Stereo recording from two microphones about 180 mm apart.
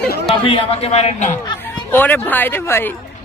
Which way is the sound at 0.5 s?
30° left (ahead or behind).